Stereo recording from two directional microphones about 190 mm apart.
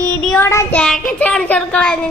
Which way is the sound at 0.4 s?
15° left (ahead or behind).